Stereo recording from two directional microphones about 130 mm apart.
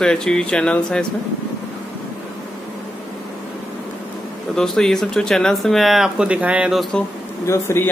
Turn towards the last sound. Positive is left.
turn(degrees=20)  # may be behind; listen again after turning